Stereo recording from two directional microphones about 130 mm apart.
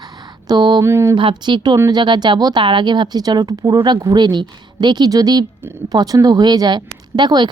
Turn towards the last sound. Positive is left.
turn(degrees=-35)  # may be behind; listen again after turning